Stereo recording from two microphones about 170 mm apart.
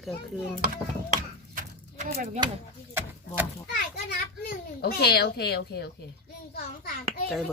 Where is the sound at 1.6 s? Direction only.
55° right (ahead or behind).